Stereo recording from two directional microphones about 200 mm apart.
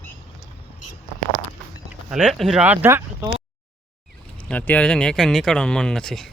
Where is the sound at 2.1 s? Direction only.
Centre (ahead or behind).